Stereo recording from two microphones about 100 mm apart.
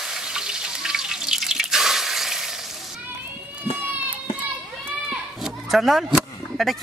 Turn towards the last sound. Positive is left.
turn(degrees=0)  # may be behind; listen again after turning